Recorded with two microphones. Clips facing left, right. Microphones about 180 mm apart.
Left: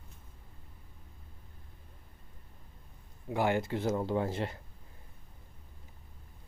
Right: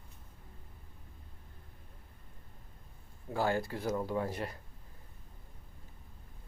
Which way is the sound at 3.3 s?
20° left (ahead or behind).